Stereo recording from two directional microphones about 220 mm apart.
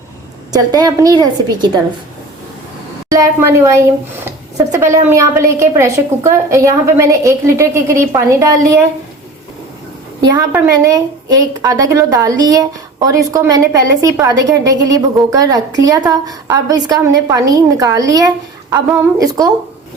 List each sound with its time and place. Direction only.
0.5 s speech: 15° right (ahead or behind)
3.1 s speech: 15° right (ahead or behind)
10.2 s speech: 15° right (ahead or behind)